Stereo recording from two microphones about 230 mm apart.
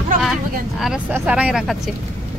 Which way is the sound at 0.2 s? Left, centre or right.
Centre.